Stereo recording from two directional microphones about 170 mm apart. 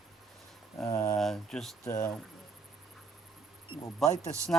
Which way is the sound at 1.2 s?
Centre (ahead or behind).